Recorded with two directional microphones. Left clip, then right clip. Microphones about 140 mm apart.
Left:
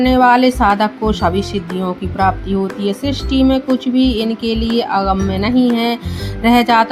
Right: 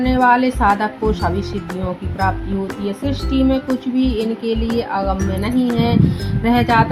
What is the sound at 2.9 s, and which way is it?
Speech, 55° left (ahead or behind).